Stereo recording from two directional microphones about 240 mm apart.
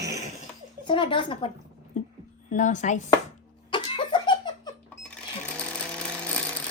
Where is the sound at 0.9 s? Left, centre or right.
Centre.